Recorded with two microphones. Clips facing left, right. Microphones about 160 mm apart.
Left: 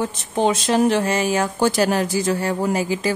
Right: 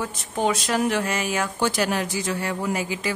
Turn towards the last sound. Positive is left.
turn(degrees=35)  # may be behind; listen again after turning